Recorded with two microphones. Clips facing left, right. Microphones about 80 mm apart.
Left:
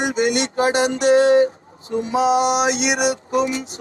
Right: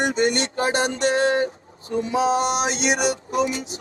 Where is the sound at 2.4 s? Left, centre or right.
Left.